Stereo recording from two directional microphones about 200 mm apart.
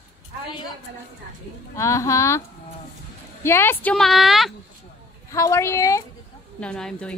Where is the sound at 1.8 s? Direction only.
15° left (ahead or behind).